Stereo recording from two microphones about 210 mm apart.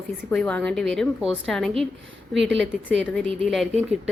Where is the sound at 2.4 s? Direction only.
60° right (ahead or behind).